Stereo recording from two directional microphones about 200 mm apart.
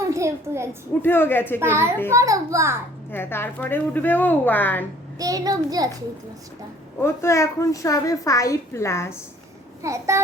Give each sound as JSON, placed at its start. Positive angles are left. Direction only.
{"t": 0.0, "sound": "a child's voice", "side_deg": -15}
{"t": 1.0, "sound": "a woman's voice", "side_deg": 10}
{"t": 1.5, "sound": "a child's voice", "side_deg": -10}
{"t": 3.1, "sound": "a woman's voice", "side_deg": 10}
{"t": 5.1, "sound": "a child's voice", "side_deg": -15}
{"t": 7.0, "sound": "a woman's voice", "side_deg": 15}
{"t": 9.8, "sound": "a child's voice", "side_deg": -15}